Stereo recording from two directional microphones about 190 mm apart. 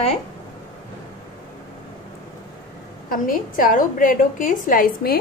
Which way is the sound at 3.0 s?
45° left (ahead or behind).